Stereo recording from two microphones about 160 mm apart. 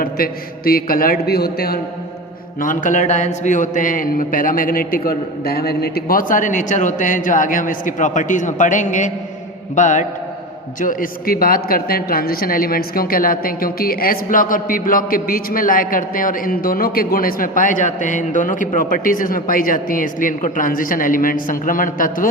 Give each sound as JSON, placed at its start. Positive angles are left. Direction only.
{"t": 0.0, "sound": "a man's voice", "side_deg": 65}
{"t": 2.6, "sound": "a man's voice", "side_deg": 55}